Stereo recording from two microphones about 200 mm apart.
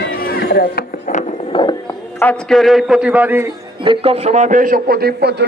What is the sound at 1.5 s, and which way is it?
Music, 25° left (ahead or behind).